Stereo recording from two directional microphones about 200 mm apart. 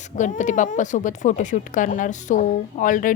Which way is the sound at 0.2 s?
40° left (ahead or behind).